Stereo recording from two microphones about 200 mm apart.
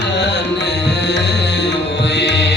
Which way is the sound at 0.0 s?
60° left (ahead or behind).